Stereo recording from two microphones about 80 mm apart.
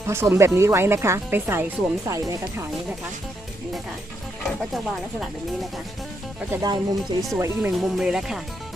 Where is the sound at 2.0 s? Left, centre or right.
Right.